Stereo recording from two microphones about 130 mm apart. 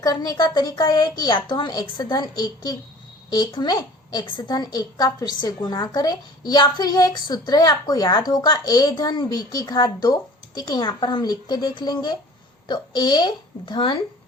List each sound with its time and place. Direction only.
0.0 s speech: 30° left (ahead or behind)